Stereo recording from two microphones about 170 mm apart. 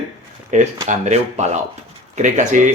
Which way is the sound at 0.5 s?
45° right (ahead or behind).